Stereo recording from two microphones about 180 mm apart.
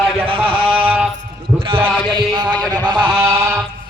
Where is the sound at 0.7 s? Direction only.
10° right (ahead or behind).